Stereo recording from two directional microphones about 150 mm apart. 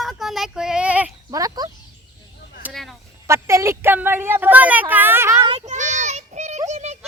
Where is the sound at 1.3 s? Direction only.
25° right (ahead or behind).